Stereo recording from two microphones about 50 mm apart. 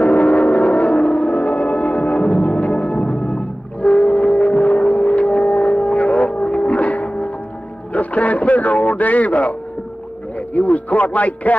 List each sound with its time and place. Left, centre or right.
0.0 s gong: left
7.9 s radio: left
10.5 s speech: left